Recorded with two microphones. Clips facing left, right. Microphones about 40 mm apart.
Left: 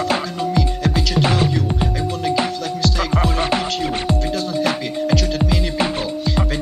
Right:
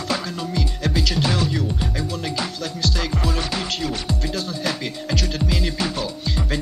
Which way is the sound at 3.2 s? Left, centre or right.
Left.